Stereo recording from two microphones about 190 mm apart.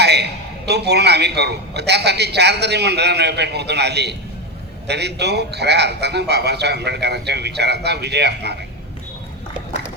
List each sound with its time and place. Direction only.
0.0 s a man's voice: 60° right (ahead or behind)